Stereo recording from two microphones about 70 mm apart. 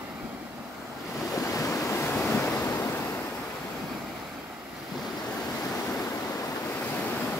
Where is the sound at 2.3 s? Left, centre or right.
Left.